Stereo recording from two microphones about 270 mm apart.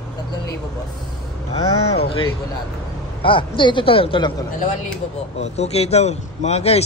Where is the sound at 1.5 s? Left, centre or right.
Left.